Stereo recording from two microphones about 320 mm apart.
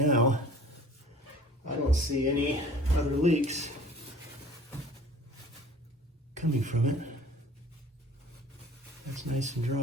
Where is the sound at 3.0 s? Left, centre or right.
Right.